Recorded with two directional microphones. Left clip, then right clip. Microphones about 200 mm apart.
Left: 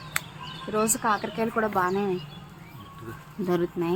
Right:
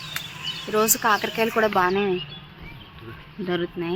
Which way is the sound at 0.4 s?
20° right (ahead or behind).